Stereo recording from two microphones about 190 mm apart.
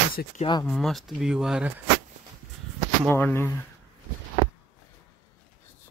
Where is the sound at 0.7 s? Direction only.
Centre (ahead or behind).